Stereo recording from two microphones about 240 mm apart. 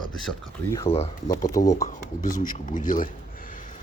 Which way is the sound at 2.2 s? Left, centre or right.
Left.